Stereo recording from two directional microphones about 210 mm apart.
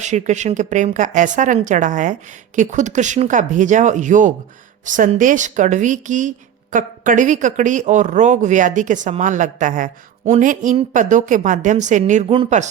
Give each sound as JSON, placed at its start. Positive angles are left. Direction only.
{"t": 0.0, "sound": "speech", "side_deg": -35}